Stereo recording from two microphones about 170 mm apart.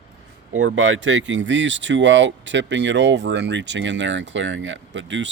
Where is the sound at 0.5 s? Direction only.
90° right.